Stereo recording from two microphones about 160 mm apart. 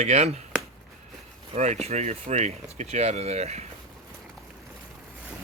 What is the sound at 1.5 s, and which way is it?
Speech, 45° right (ahead or behind).